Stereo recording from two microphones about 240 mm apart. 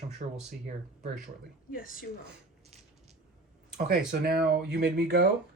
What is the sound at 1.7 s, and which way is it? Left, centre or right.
Speech, left.